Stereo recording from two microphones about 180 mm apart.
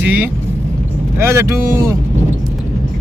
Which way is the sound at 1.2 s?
15° right (ahead or behind).